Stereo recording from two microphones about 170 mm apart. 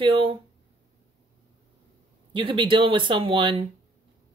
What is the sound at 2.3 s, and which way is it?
Speech, 25° right (ahead or behind).